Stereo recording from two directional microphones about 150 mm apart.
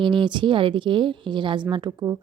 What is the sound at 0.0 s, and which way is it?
A woman's voice, 35° right (ahead or behind).